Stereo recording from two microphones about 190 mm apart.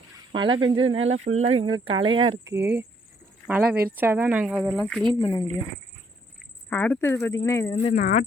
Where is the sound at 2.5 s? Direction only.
10° right (ahead or behind).